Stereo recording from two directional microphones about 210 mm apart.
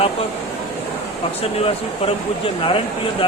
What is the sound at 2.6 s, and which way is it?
Speech, 25° left (ahead or behind).